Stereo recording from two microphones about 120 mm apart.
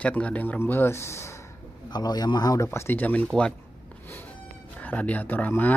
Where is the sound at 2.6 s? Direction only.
20° left (ahead or behind).